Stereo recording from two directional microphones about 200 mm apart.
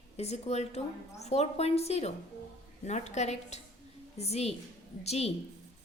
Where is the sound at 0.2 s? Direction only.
35° left (ahead or behind).